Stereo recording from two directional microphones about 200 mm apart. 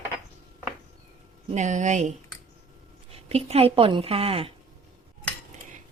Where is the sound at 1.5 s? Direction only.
35° right (ahead or behind).